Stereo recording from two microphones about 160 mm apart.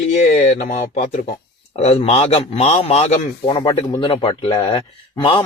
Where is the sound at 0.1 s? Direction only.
45° left (ahead or behind).